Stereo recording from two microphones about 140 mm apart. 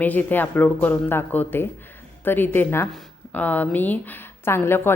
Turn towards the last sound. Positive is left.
turn(degrees=15)  # may be behind; listen again after turning